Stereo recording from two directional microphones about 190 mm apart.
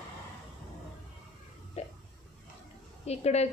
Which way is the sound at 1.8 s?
35° left (ahead or behind).